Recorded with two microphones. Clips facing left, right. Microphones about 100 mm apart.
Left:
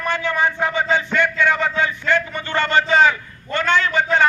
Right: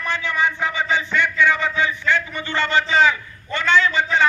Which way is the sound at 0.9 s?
50° left (ahead or behind).